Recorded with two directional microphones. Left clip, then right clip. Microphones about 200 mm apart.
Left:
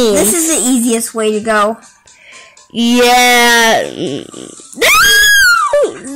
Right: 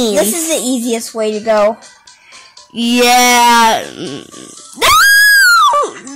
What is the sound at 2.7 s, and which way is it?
Speech, 5° right (ahead or behind).